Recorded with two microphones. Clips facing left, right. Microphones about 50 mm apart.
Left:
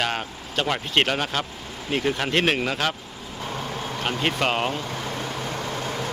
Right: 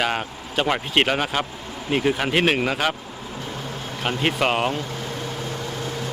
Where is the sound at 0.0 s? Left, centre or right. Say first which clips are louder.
Right 2 dB; centre.